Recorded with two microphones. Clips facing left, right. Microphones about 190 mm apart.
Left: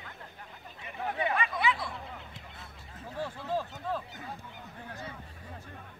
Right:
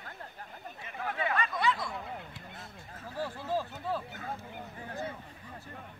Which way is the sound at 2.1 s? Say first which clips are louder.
Right 3 dB; 50° right (ahead or behind).